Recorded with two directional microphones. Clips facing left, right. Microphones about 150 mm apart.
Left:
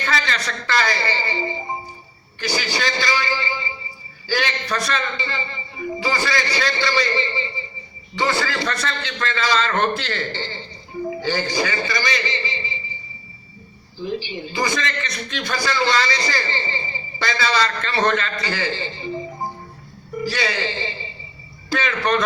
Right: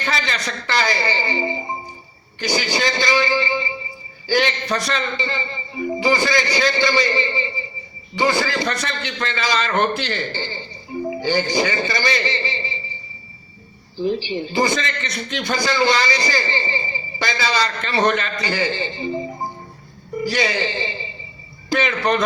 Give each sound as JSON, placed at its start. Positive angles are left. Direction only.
{"t": 0.0, "sound": "a sound", "side_deg": -15}
{"t": 4.3, "sound": "a man's voice", "side_deg": -20}
{"t": 8.2, "sound": "a man's voice", "side_deg": -15}
{"t": 14.0, "sound": "a man's voice", "side_deg": -30}
{"t": 20.3, "sound": "a man's voice", "side_deg": -20}